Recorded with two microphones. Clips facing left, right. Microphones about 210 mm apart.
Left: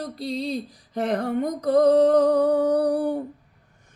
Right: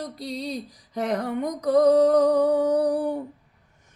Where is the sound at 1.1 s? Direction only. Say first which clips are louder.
Left 2 dB; 50° left (ahead or behind).